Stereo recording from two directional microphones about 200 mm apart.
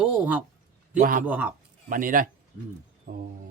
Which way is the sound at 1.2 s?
5° right (ahead or behind).